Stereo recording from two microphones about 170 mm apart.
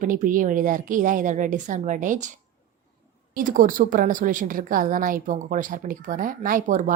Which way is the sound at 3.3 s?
50° right (ahead or behind).